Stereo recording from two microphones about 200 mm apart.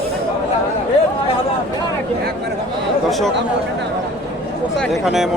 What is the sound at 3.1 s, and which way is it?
Speech, centre (ahead or behind).